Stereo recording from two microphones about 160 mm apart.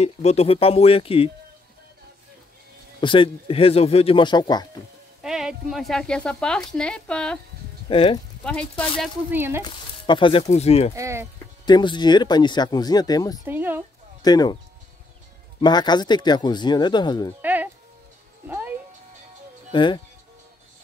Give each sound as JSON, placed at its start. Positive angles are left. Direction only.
{"t": 0.0, "sound": "speech", "side_deg": 40}
{"t": 3.0, "sound": "speech", "side_deg": 30}
{"t": 5.2, "sound": "speech", "side_deg": -5}
{"t": 7.9, "sound": "speech", "side_deg": 35}
{"t": 8.5, "sound": "speech", "side_deg": 5}
{"t": 9.3, "sound": "speech", "side_deg": -15}
{"t": 9.6, "sound": "speech", "side_deg": 30}
{"t": 11.0, "sound": "speech", "side_deg": -15}
{"t": 11.6, "sound": "speech", "side_deg": 30}
{"t": 13.5, "sound": "speech", "side_deg": -10}
{"t": 14.2, "sound": "speech", "side_deg": 25}
{"t": 15.6, "sound": "speech", "side_deg": 25}
{"t": 17.4, "sound": "music", "side_deg": -10}
{"t": 19.7, "sound": "speech", "side_deg": 30}